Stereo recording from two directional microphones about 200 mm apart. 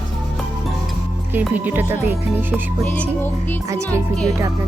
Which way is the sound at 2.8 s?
5° left (ahead or behind).